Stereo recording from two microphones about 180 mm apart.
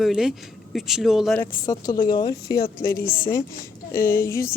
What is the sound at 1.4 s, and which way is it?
Speech, 20° left (ahead or behind).